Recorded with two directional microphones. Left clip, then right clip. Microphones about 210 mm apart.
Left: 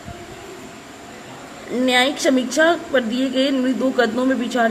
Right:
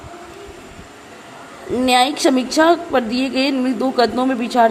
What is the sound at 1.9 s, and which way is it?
A woman's voice, 20° right (ahead or behind).